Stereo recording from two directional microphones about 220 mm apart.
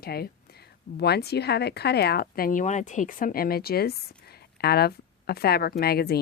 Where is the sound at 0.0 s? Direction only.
45° left (ahead or behind).